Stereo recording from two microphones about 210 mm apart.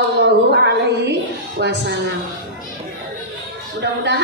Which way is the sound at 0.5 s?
50° right (ahead or behind).